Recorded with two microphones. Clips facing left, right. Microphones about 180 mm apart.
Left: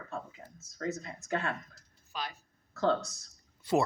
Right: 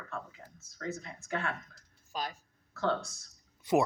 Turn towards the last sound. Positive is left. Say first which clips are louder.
# right 1 dB
turn(degrees=-20)  # may be behind; listen again after turning